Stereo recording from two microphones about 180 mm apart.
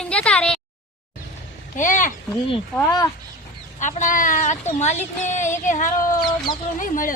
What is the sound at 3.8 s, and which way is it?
Speech, 45° left (ahead or behind).